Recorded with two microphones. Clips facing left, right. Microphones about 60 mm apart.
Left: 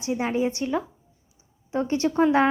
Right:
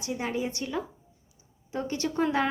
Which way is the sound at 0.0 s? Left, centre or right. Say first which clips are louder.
Left 6 dB; left.